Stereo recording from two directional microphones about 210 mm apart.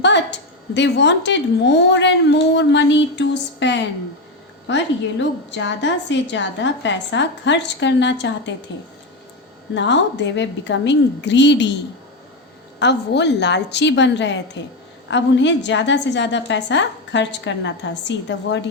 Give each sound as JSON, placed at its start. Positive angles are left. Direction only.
{"t": 0.0, "sound": "a woman's voice", "side_deg": 55}
{"t": 9.7, "sound": "a woman's voice", "side_deg": 60}
{"t": 12.8, "sound": "a woman's voice", "side_deg": 55}